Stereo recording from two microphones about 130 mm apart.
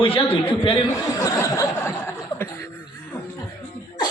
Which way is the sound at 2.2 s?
15° left (ahead or behind).